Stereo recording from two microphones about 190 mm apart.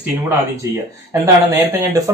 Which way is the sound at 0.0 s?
10° right (ahead or behind).